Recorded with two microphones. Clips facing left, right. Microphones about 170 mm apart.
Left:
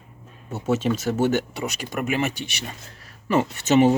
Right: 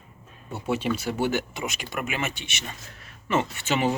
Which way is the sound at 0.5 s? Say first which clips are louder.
Left 4 dB; 45° left (ahead or behind).